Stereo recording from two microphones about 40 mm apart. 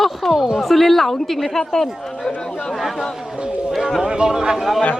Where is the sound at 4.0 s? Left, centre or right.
Centre.